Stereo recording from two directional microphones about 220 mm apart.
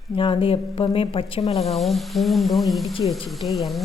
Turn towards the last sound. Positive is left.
turn(degrees=0)  # may be behind; listen again after turning